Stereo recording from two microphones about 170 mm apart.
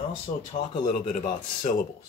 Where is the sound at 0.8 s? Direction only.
45° left (ahead or behind).